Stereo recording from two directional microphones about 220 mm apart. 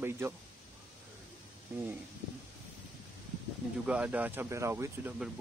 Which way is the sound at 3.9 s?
5° right (ahead or behind).